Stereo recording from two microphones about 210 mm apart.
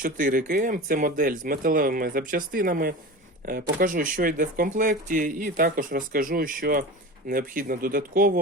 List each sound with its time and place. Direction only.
0.0 s speech: 40° right (ahead or behind)